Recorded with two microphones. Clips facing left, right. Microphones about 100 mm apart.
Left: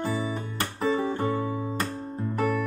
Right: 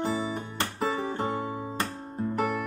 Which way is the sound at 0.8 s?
20° right (ahead or behind).